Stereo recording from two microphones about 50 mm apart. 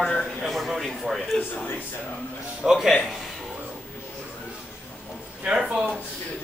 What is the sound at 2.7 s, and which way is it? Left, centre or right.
Speech, centre.